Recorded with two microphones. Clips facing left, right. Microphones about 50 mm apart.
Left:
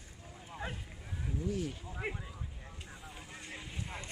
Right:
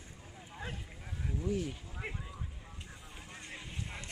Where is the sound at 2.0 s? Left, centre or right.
Centre.